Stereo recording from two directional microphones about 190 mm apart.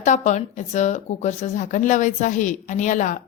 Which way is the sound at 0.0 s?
40° left (ahead or behind).